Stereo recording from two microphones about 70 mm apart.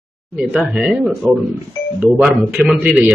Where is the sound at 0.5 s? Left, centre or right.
Centre.